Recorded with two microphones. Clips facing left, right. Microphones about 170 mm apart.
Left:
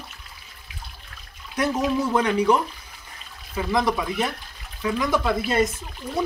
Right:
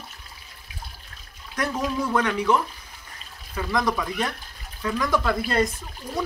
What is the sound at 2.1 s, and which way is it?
Speech, 15° left (ahead or behind).